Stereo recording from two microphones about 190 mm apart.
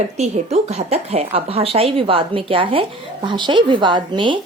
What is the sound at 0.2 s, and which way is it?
Speech, 35° right (ahead or behind).